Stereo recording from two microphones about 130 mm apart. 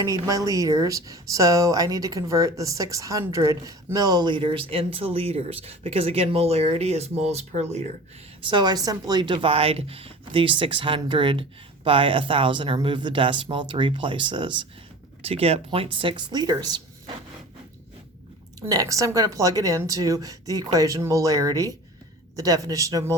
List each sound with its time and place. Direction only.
0.0 s speech: 25° right (ahead or behind); by 7.8 s 60° right (ahead or behind)
8.4 s speech: 35° right (ahead or behind)
15.2 s speech: 50° right (ahead or behind); by 17.2 s 30° right (ahead or behind)
18.6 s speech: 25° right (ahead or behind)